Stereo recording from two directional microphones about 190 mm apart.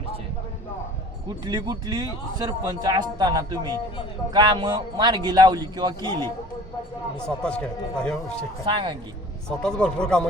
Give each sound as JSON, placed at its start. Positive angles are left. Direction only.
{"t": 1.5, "sound": "speech", "side_deg": -20}
{"t": 7.3, "sound": "a man's voice", "side_deg": 5}
{"t": 8.6, "sound": "speech", "side_deg": -25}
{"t": 9.5, "sound": "a man's voice", "side_deg": 5}